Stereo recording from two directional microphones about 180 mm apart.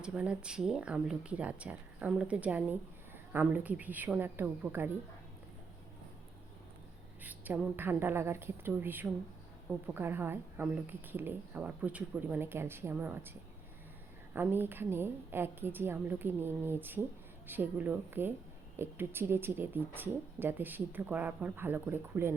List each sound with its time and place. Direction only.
0.0 s speech: 5° right (ahead or behind)
7.2 s speech: 10° right (ahead or behind)
14.3 s speech: 10° right (ahead or behind)